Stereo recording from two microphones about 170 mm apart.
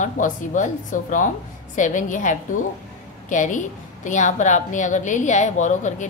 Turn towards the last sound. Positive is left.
turn(degrees=45)  # may be behind; listen again after turning